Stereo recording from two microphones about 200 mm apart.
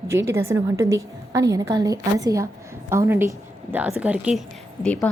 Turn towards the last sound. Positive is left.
turn(degrees=5)  # may be behind; listen again after turning